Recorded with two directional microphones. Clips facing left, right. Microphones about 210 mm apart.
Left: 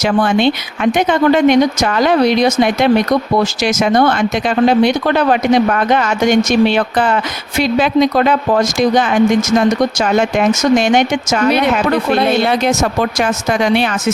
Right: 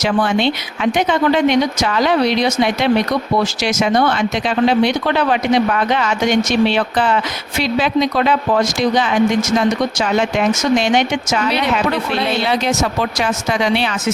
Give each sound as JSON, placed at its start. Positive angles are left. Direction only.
{"t": 0.0, "sound": "speech", "side_deg": 50}